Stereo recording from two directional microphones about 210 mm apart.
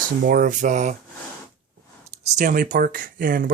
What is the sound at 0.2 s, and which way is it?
Speech, 40° right (ahead or behind).